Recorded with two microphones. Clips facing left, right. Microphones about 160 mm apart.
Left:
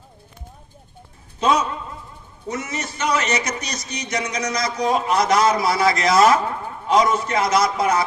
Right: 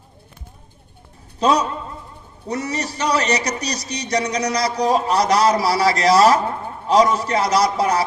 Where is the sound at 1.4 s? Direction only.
35° right (ahead or behind).